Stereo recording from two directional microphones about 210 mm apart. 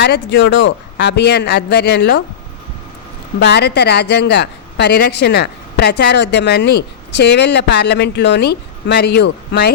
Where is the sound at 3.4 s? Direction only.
50° left (ahead or behind).